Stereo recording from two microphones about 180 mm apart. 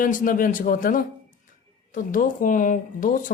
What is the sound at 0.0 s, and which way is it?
Speech, 45° left (ahead or behind).